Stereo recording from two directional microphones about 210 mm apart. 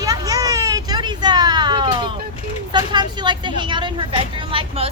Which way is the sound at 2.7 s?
20° right (ahead or behind).